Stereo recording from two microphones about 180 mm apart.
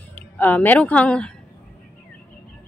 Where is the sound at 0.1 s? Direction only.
10° left (ahead or behind).